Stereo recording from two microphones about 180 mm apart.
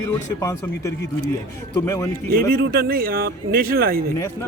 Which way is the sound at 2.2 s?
55° right (ahead or behind).